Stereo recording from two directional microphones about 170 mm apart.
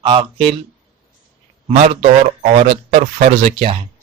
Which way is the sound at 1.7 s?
40° right (ahead or behind).